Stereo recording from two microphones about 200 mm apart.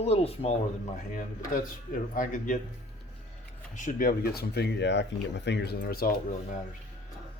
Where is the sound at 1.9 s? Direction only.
45° left (ahead or behind).